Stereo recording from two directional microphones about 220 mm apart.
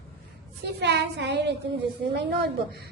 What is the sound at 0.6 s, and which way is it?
A woman's voice, 50° right (ahead or behind).